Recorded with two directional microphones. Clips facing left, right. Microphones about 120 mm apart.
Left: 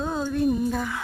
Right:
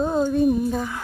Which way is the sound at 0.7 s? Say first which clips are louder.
Right 2 dB; 15° right (ahead or behind).